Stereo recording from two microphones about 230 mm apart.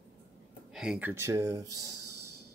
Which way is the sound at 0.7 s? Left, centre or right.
Centre.